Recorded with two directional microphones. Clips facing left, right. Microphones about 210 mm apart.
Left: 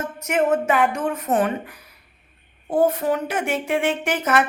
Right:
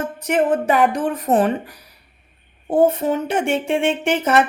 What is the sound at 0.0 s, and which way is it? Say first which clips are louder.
A woman's voice: right 2 dB; 30° right (ahead or behind).